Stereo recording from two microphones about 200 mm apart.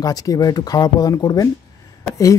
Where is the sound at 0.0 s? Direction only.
20° left (ahead or behind).